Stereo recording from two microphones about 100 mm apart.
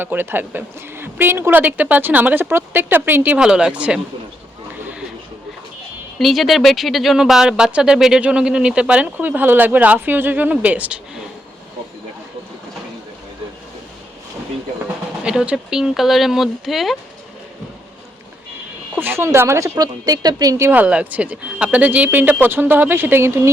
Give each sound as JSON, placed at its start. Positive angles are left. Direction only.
{"t": 0.0, "sound": "a man's voice", "side_deg": -20}
{"t": 3.4, "sound": "speech", "side_deg": -10}
{"t": 6.1, "sound": "speech", "side_deg": 0}
{"t": 15.2, "sound": "speech", "side_deg": -10}
{"t": 18.9, "sound": "a man's voice", "side_deg": -20}
{"t": 20.6, "sound": "speech", "side_deg": -20}